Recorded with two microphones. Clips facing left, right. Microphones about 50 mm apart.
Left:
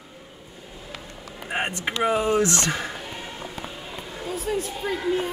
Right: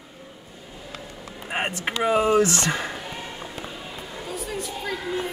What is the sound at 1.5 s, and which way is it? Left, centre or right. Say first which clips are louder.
Speech: even; centre.